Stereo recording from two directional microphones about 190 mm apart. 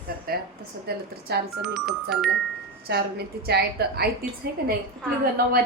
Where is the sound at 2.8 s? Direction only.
55° right (ahead or behind).